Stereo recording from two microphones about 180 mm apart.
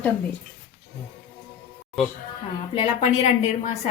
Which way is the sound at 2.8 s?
35° left (ahead or behind).